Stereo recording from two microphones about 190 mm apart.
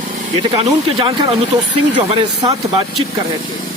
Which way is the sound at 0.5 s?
25° right (ahead or behind).